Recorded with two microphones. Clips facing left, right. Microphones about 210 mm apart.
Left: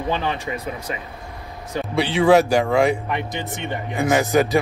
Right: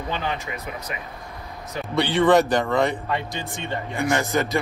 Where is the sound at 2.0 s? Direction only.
5° left (ahead or behind).